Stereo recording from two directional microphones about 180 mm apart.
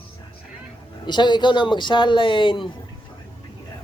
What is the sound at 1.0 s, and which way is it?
Speech, 25° left (ahead or behind).